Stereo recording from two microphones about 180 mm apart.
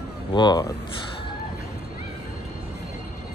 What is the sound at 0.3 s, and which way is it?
Speech, 25° left (ahead or behind).